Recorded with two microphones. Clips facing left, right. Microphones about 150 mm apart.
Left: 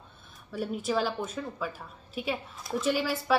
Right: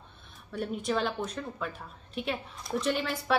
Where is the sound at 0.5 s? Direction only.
5° left (ahead or behind).